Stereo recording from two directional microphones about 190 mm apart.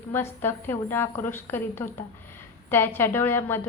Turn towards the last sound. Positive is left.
turn(degrees=10)  # may be behind; listen again after turning